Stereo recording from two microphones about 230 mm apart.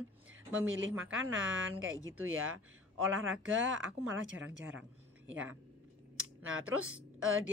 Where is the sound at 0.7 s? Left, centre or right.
Right.